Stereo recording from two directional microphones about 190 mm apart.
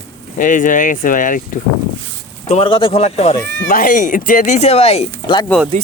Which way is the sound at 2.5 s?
30° left (ahead or behind).